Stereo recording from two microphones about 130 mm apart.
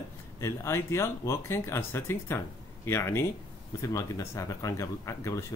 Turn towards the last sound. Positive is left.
turn(degrees=25)  # may be behind; listen again after turning